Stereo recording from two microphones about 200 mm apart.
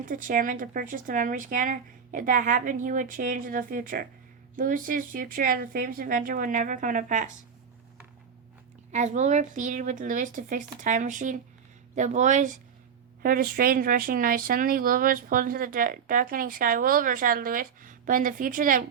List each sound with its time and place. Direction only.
0.0 s speech: 40° right (ahead or behind)
8.9 s speech: 35° right (ahead or behind)